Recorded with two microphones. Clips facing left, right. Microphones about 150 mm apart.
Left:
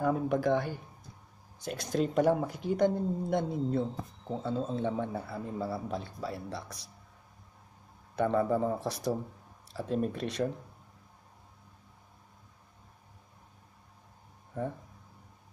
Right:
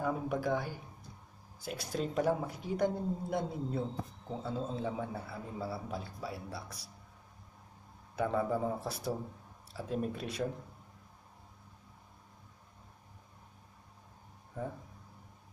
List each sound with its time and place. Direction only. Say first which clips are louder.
0.0 s speech: left 5 dB; centre (ahead or behind)
8.2 s speech: left 4 dB; 5° right (ahead or behind)